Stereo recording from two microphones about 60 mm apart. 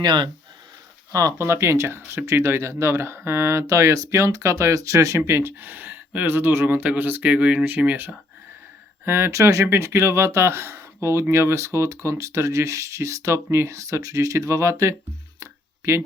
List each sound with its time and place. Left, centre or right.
1.4 s speech: right
5.5 s speech: right
9.0 s speech: right
15.4 s a sound: right